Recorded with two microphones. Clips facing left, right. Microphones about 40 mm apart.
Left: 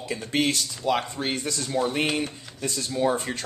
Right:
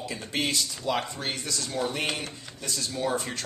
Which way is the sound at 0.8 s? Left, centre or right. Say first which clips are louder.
Left 6 dB; centre.